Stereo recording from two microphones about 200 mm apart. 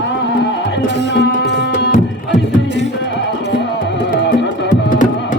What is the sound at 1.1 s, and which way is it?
Tabla, 60° left (ahead or behind).